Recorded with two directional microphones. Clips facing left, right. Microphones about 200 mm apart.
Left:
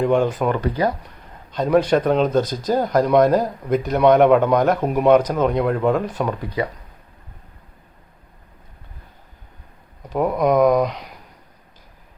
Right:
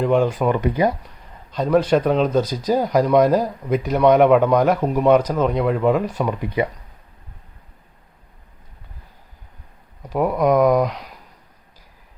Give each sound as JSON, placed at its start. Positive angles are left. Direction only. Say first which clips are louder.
{"t": 0.0, "sound": "speech", "louder": "even", "side_deg": -5}
{"t": 1.6, "sound": "speech", "louder": "even", "side_deg": 0}
{"t": 10.1, "sound": "speech", "louder": "right 1 dB", "side_deg": -5}